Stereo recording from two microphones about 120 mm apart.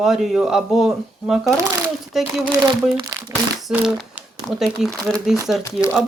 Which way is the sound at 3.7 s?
5° right (ahead or behind).